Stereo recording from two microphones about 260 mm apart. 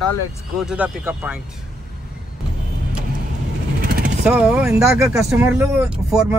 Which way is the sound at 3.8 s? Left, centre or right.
Right.